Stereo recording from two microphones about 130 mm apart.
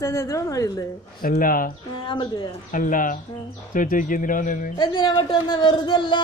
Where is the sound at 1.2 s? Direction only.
90° left.